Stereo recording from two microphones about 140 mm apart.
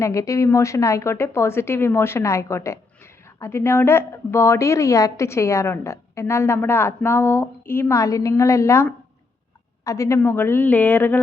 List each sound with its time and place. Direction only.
0.0 s a woman's voice: 20° left (ahead or behind)